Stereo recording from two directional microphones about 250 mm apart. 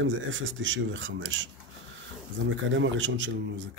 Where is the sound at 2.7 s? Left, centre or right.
Right.